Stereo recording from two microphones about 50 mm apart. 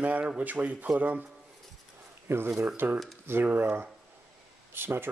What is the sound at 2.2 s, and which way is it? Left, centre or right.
Speech, right.